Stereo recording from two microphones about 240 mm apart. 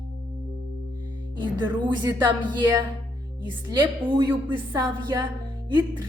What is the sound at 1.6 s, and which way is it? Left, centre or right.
Speech, centre.